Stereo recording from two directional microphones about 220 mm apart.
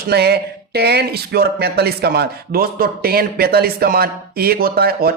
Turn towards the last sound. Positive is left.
turn(degrees=-45)  # may be behind; listen again after turning